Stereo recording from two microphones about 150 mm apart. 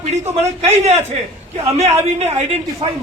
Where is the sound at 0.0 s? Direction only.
45° right (ahead or behind).